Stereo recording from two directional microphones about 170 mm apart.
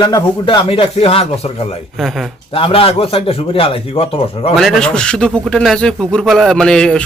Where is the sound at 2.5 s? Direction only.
35° left (ahead or behind).